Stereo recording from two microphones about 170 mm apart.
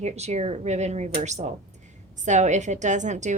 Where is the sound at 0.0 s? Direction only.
40° right (ahead or behind).